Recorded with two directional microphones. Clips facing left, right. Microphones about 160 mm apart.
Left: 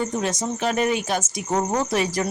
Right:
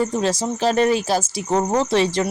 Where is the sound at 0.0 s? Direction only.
30° right (ahead or behind).